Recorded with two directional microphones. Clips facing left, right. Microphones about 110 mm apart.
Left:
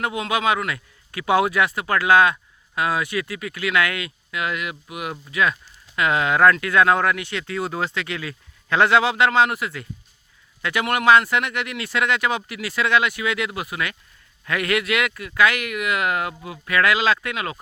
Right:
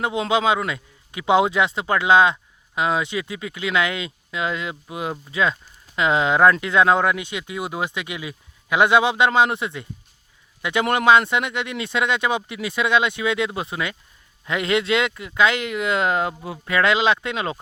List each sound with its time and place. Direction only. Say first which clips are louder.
0.0 s a man's voice: right 2 dB; 25° right (ahead or behind)